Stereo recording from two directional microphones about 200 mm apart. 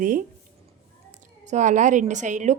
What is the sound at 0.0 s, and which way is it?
Speech, 45° right (ahead or behind).